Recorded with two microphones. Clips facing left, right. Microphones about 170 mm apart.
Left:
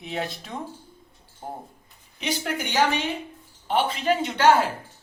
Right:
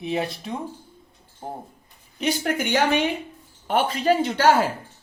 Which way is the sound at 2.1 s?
50° right (ahead or behind).